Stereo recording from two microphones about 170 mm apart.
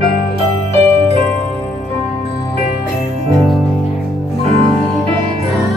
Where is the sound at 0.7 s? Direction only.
35° right (ahead or behind).